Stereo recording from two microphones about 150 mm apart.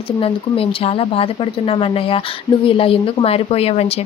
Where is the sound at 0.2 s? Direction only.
40° left (ahead or behind).